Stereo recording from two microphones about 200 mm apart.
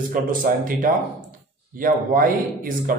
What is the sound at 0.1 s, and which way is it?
A man's voice, 45° right (ahead or behind).